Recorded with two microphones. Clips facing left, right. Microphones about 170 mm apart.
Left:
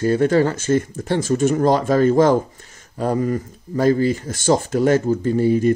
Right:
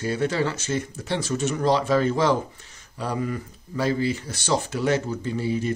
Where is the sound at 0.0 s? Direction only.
45° left (ahead or behind).